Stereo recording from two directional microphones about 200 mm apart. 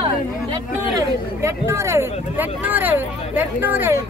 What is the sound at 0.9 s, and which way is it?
Speech, 15° right (ahead or behind).